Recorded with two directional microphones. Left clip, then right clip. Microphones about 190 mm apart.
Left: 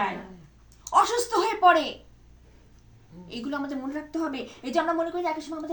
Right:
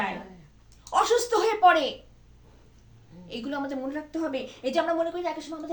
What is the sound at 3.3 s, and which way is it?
A woman's voice, 10° right (ahead or behind).